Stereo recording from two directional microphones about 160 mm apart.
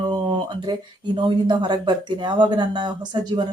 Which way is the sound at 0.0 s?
30° right (ahead or behind).